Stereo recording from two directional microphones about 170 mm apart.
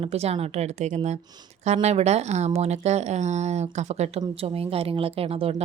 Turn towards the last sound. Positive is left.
turn(degrees=-35)  # may be behind; listen again after turning